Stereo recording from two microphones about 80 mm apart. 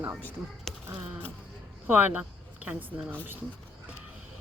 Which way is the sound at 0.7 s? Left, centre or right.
Centre.